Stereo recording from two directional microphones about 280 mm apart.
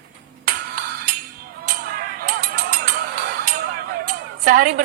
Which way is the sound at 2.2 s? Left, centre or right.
Right.